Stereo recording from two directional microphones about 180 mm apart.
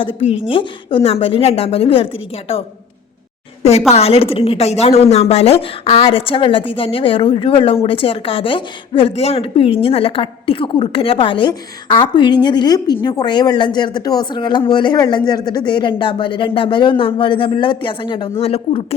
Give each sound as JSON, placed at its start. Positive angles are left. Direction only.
{"t": 0.5, "sound": "a woman's voice", "side_deg": 30}
{"t": 3.6, "sound": "a woman's voice", "side_deg": 35}